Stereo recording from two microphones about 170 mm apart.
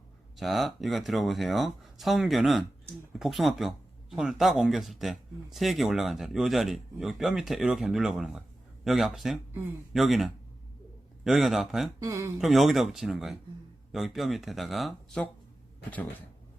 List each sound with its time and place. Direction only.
0.3 s speech: centre (ahead or behind)
9.5 s speech: 15° right (ahead or behind)
9.9 s speech: centre (ahead or behind)
11.9 s speech: 20° right (ahead or behind)
12.4 s speech: centre (ahead or behind)